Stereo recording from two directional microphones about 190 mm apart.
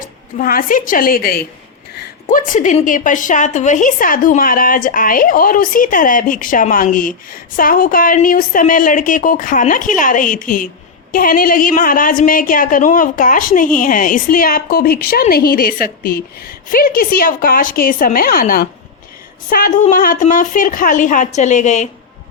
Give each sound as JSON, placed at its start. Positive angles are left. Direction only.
{"t": 0.0, "sound": "a woman's voice", "side_deg": 45}